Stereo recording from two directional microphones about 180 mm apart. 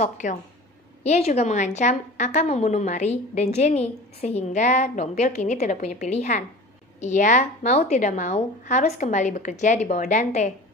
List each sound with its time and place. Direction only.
0.0 s a woman's voice: 45° left (ahead or behind)